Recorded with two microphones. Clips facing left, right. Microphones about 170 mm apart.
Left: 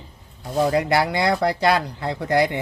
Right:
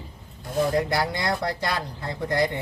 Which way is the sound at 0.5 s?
65° left (ahead or behind).